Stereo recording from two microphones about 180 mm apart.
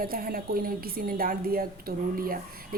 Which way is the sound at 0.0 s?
55° right (ahead or behind).